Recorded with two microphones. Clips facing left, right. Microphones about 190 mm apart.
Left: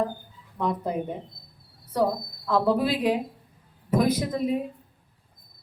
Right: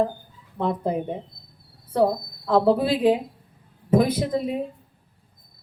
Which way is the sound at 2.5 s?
25° right (ahead or behind).